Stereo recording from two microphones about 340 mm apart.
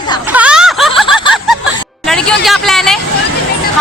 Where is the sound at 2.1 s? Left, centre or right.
Centre.